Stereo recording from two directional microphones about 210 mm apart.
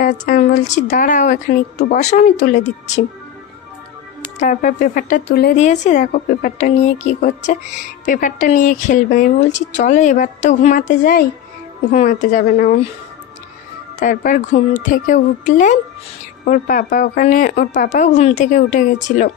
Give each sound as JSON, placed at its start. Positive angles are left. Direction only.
{"t": 0.0, "sound": "a woman's voice", "side_deg": 40}
{"t": 4.4, "sound": "a woman's voice", "side_deg": 35}
{"t": 5.6, "sound": "a woman's voice", "side_deg": 35}
{"t": 13.9, "sound": "a woman's voice", "side_deg": 40}